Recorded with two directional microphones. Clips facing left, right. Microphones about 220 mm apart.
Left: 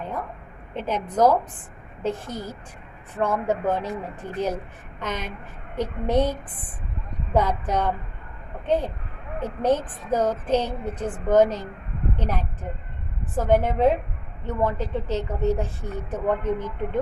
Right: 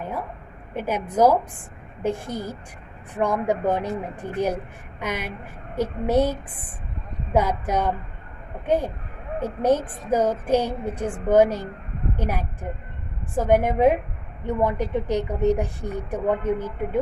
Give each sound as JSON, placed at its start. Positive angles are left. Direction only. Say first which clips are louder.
{"t": 0.0, "sound": "a sound", "louder": "right 1 dB", "side_deg": -10}
{"t": 0.7, "sound": "a woman's voice", "louder": "right 1 dB", "side_deg": -10}
{"t": 7.3, "sound": "a woman's voice", "louder": "right 1 dB", "side_deg": -10}